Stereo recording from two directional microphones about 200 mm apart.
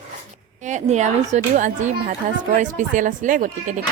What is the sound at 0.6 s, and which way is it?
Speech, 35° right (ahead or behind).